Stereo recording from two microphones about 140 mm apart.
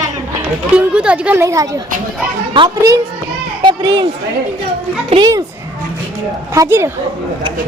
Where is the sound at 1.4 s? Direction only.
20° right (ahead or behind).